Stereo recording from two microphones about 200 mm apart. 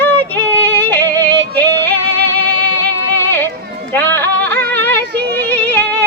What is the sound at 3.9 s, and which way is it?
Music, 10° left (ahead or behind).